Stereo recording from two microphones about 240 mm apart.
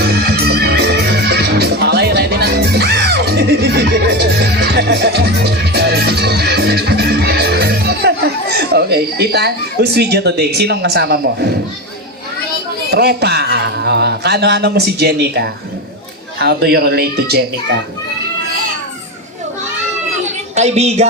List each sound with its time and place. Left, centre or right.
0.3 s music: right
8.5 s speech: right
12.9 s a man's voice: right
20.6 s speech: right